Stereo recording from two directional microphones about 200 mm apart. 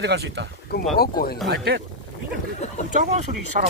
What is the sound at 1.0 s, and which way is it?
Speech, 50° left (ahead or behind).